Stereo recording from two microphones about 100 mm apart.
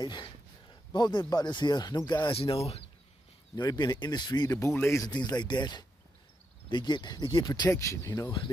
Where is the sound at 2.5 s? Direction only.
90° left.